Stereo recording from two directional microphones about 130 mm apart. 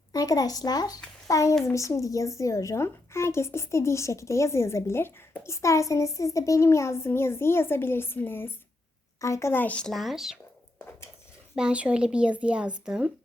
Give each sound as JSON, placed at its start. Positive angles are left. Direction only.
{"t": 0.1, "sound": "a woman's voice", "side_deg": 30}
{"t": 11.5, "sound": "speech", "side_deg": -5}